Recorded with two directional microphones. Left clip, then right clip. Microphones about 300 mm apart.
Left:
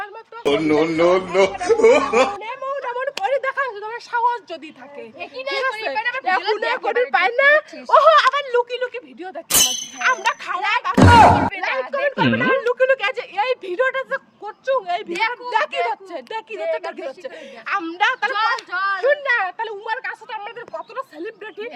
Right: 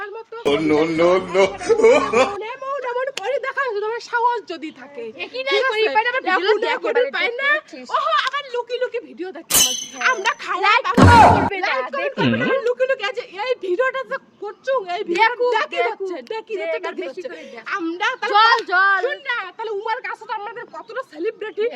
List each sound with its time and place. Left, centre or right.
0.0 s a sound: centre
5.2 s speech: centre
7.1 s a woman's voice: centre
10.6 s music: centre
10.8 s a woman's voice: centre
17.7 s a woman's voice: centre
18.3 s speech: centre
19.0 s a woman's voice: centre